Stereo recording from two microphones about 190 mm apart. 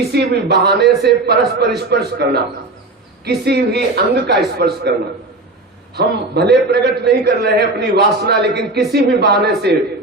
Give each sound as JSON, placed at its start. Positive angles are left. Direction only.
{"t": 0.1, "sound": "a man's voice", "side_deg": -60}
{"t": 6.0, "sound": "a man's voice", "side_deg": -60}